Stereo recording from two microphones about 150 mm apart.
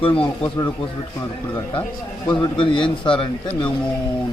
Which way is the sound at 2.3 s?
30° left (ahead or behind).